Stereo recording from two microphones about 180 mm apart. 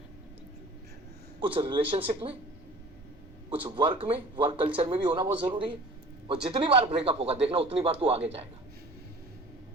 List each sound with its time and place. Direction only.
1.4 s a man's voice: 30° right (ahead or behind)
3.5 s a man's voice: 30° right (ahead or behind)